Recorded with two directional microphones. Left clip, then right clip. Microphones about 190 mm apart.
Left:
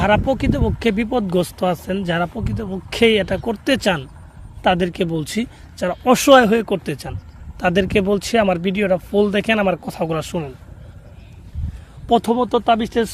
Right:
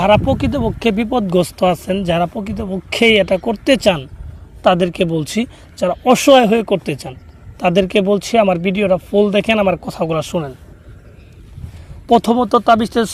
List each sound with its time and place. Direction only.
0.0 s speech: 15° right (ahead or behind)
12.0 s speech: 30° right (ahead or behind)